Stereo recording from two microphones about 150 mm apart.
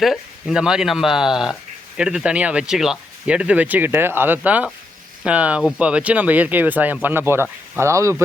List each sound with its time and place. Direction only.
0.0 s speech: centre (ahead or behind); by 8.2 s 20° right (ahead or behind)